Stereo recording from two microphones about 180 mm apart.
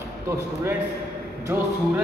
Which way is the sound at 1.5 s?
10° right (ahead or behind).